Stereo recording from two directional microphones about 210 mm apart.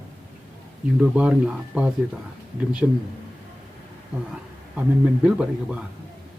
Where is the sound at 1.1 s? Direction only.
5° right (ahead or behind).